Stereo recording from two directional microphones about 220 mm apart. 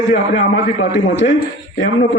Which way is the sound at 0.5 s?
55° left (ahead or behind).